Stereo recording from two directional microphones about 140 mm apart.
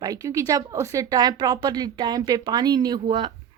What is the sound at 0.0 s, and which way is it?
Speech, 25° right (ahead or behind).